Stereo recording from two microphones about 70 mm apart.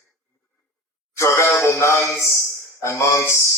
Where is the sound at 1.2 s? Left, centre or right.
Left.